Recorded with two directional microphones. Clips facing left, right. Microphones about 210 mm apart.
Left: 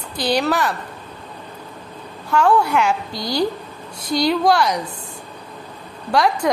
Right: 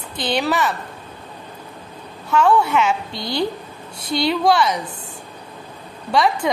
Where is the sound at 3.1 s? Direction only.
25° right (ahead or behind).